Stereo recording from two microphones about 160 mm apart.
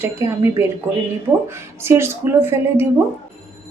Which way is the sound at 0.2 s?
20° right (ahead or behind).